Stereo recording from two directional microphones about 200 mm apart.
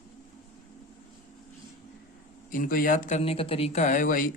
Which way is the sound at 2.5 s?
45° left (ahead or behind).